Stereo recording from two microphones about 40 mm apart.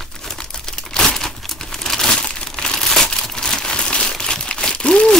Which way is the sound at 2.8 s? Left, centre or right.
Centre.